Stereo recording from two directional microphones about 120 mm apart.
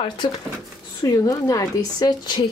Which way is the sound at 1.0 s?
30° left (ahead or behind).